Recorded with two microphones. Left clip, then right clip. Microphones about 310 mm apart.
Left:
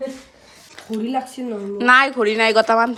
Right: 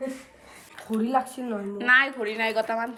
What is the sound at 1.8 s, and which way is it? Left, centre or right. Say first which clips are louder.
Speech: left 7 dB; left.